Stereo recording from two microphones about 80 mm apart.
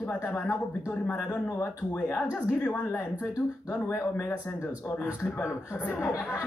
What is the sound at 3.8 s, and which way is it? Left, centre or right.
Speech, left.